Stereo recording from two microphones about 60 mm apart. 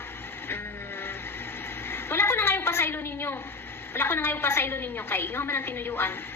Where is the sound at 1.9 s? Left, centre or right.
Left.